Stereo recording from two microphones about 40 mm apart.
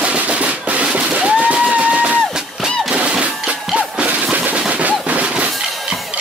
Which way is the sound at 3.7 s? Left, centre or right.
Right.